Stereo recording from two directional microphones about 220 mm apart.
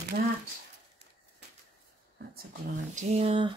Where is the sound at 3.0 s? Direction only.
30° right (ahead or behind).